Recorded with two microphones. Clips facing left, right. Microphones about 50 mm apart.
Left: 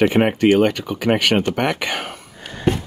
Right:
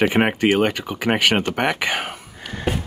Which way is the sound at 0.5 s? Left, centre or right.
Centre.